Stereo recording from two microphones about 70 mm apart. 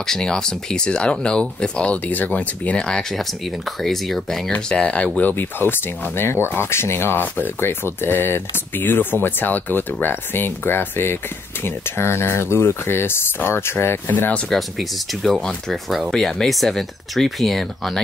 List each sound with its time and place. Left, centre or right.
0.0 s speech: centre
4.5 s speech: centre; by 14.3 s left
14.5 s speech: centre